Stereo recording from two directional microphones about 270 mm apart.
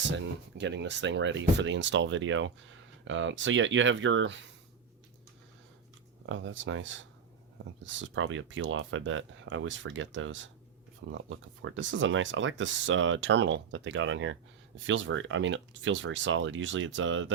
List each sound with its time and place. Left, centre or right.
0.6 s speech: right
6.2 s speech: right